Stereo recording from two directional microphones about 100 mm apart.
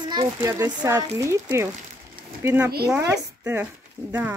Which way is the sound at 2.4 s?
25° right (ahead or behind).